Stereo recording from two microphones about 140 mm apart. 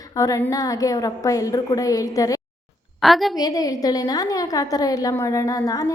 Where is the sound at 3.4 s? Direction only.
25° left (ahead or behind).